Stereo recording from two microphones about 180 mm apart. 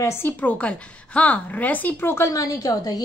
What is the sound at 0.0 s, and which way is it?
A woman's voice, 15° left (ahead or behind).